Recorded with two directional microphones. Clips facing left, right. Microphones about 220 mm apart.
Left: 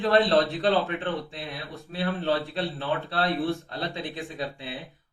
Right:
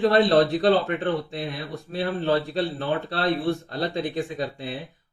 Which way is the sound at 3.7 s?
35° right (ahead or behind).